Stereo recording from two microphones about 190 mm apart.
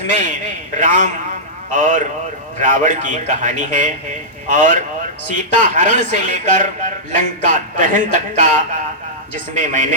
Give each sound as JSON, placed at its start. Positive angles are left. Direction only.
{"t": 0.1, "sound": "a man's voice", "side_deg": -40}